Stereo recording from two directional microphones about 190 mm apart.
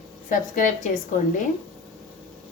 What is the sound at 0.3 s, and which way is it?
Speech, 45° left (ahead or behind).